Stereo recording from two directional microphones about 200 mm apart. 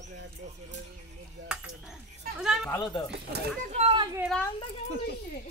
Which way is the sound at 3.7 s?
30° right (ahead or behind).